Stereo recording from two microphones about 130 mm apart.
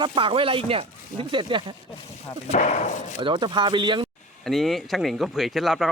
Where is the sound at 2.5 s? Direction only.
65° left (ahead or behind).